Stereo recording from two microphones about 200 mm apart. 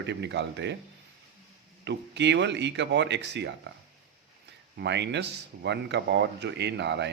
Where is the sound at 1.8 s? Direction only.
60° right (ahead or behind).